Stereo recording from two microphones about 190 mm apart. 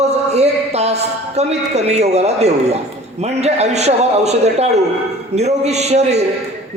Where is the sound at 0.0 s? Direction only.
35° right (ahead or behind).